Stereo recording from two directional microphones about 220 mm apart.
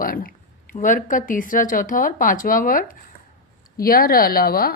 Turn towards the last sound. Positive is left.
turn(degrees=45)  # may be behind; listen again after turning